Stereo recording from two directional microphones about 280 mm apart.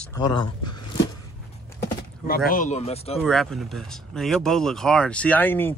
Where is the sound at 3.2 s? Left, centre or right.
Centre.